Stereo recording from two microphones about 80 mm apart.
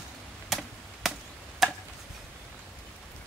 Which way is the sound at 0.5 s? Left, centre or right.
Centre.